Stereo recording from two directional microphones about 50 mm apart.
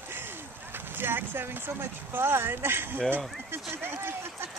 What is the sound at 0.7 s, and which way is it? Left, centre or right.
Speech, right.